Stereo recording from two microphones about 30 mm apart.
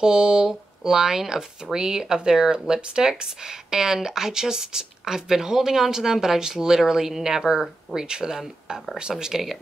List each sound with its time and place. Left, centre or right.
0.0 s speech: right
9.1 s speech: centre